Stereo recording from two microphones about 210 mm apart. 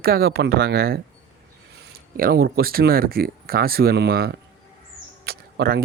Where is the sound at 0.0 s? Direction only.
45° right (ahead or behind).